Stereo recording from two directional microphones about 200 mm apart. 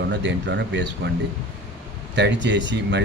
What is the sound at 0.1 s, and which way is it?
Speech, 60° right (ahead or behind).